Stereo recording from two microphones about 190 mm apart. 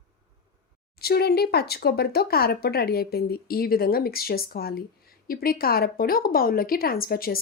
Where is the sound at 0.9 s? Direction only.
55° left (ahead or behind).